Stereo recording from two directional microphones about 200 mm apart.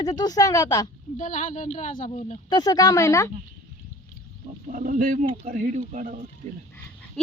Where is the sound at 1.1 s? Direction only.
40° left (ahead or behind).